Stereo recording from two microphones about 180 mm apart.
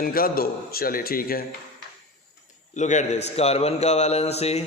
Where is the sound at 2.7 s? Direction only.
40° left (ahead or behind).